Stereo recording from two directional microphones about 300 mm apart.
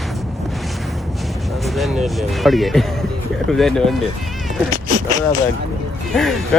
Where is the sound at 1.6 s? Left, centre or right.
Centre.